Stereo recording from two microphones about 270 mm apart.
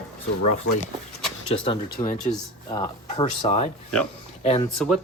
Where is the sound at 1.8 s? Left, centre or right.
Left.